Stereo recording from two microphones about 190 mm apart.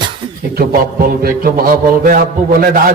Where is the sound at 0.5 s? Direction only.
50° right (ahead or behind).